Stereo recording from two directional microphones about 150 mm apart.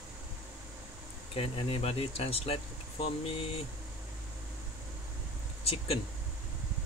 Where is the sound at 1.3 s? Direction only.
35° left (ahead or behind).